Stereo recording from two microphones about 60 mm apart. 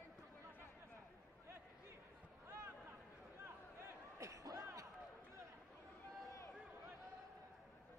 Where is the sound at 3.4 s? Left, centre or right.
Right.